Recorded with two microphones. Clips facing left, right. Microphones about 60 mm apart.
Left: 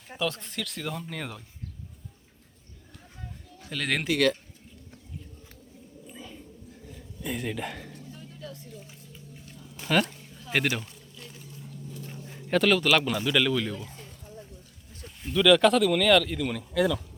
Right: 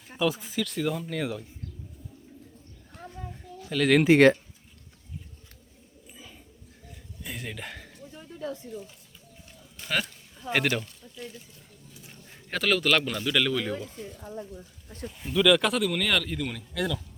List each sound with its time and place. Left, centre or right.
0.1 s speech: centre
3.7 s speech: centre
4.0 s speech: right
7.2 s speech: centre
8.2 s a sound: right
9.7 s a sound: centre
10.5 s speech: centre
12.3 s speech: centre
15.2 s speech: centre